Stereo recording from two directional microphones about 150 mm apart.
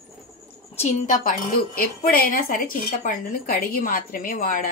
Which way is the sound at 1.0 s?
60° left (ahead or behind).